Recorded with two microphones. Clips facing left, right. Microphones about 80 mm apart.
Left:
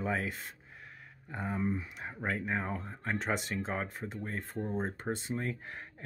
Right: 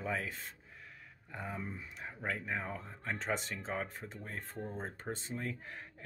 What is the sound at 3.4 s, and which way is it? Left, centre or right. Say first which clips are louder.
Speech: left 5 dB; left.